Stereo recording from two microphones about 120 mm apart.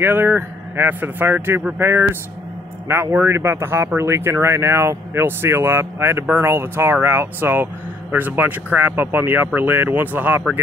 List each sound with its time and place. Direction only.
0.0 s speech: 20° right (ahead or behind)